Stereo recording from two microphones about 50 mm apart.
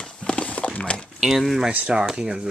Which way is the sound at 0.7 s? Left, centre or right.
Left.